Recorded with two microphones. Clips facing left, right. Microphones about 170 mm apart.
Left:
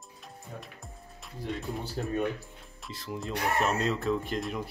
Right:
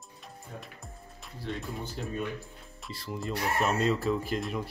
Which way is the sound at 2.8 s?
Centre (ahead or behind).